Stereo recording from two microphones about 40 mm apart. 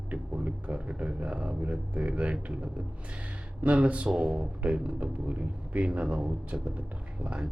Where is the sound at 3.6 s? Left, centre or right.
Right.